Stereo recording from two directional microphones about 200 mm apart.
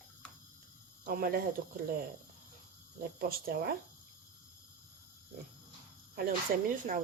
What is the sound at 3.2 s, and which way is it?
Speech, 50° right (ahead or behind).